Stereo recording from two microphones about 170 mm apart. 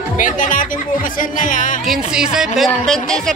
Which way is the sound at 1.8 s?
Centre (ahead or behind).